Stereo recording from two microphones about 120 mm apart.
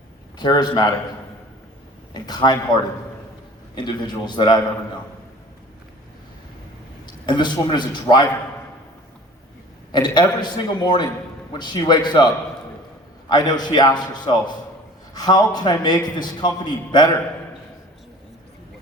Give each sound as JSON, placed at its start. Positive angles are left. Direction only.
{"t": 0.3, "sound": "a man's voice", "side_deg": 35}
{"t": 2.1, "sound": "a man's voice", "side_deg": 35}
{"t": 7.3, "sound": "a man's voice", "side_deg": 40}
{"t": 9.9, "sound": "a man's voice", "side_deg": 40}
{"t": 13.3, "sound": "a man's voice", "side_deg": 35}